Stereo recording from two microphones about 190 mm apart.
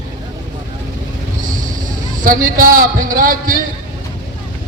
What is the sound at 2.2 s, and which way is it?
A man's voice, 45° right (ahead or behind).